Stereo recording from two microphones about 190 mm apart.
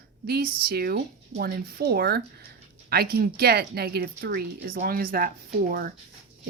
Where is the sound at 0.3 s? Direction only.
55° right (ahead or behind).